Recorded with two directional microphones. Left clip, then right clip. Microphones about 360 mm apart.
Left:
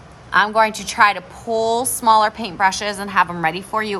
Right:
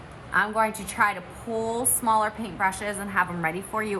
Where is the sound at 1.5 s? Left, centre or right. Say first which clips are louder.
Left 10 dB; left.